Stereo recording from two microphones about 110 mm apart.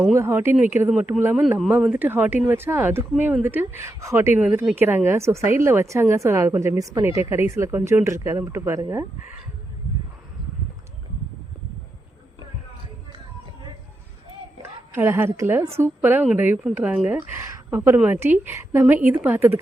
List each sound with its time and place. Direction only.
0.2 s a woman's voice: 20° right (ahead or behind)
0.9 s a woman's voice: 10° right (ahead or behind)
2.0 s a woman's voice: 15° right (ahead or behind)
14.6 s a woman's voice: 20° right (ahead or behind)